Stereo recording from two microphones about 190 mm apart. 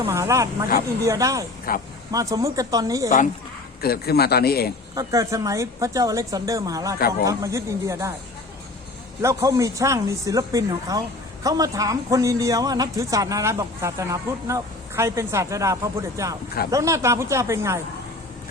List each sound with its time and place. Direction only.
0.0 s a man's voice: 15° right (ahead or behind)
1.7 s speech: 50° left (ahead or behind)
2.1 s a man's voice: 20° right (ahead or behind)
3.8 s a man's voice: 50° left (ahead or behind)
4.9 s a man's voice: 15° right (ahead or behind)
9.2 s a man's voice: 20° right (ahead or behind)